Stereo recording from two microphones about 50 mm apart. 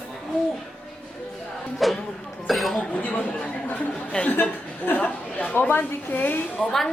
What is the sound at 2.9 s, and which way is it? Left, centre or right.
Chatter, left.